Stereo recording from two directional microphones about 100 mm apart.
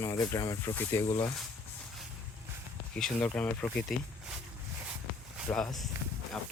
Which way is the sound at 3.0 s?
10° left (ahead or behind).